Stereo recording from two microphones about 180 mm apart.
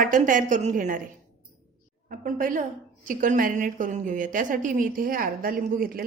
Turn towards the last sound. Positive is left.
turn(degrees=-50)  # may be behind; listen again after turning